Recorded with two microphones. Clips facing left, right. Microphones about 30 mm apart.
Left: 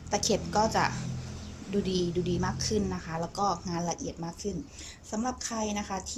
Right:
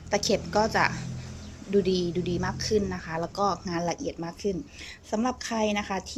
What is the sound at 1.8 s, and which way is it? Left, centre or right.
A woman's voice, centre.